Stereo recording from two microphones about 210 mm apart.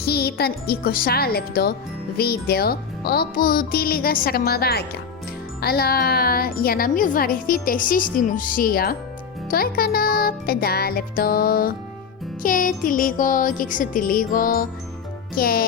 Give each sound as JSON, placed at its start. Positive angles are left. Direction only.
{"t": 0.0, "sound": "a child's voice", "side_deg": 50}
{"t": 12.4, "sound": "music", "side_deg": 40}
{"t": 15.4, "sound": "a child's voice", "side_deg": 45}